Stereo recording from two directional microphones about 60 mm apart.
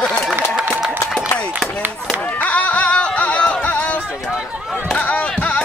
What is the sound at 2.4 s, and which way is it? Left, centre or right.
Music, left.